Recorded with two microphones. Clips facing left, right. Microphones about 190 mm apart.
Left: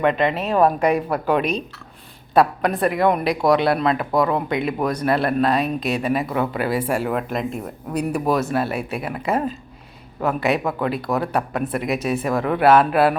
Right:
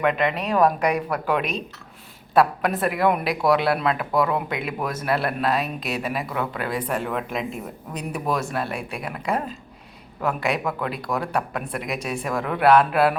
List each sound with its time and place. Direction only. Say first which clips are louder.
0.0 s a woman's voice: left 3 dB; 30° left (ahead or behind)
1.4 s speech: left 5 dB; centre (ahead or behind)